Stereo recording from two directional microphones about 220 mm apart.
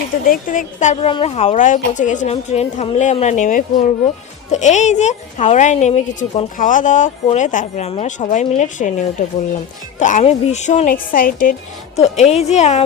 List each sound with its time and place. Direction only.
0.3 s a woman's voice: 35° left (ahead or behind)